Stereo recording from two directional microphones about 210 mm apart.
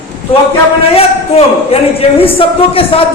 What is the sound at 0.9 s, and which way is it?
A man's voice, 30° left (ahead or behind).